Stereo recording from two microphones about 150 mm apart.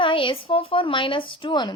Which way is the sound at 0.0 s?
35° left (ahead or behind).